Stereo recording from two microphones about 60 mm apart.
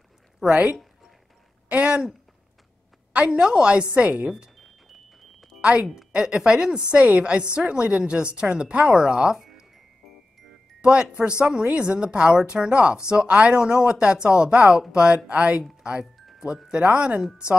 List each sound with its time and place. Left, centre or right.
0.4 s a woman's voice: centre
3.1 s a woman's voice: centre
5.6 s a woman's voice: centre
10.8 s a woman's voice: centre